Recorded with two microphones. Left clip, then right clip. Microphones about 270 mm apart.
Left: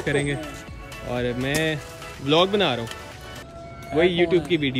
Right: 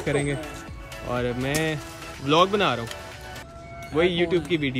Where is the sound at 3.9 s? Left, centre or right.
Centre.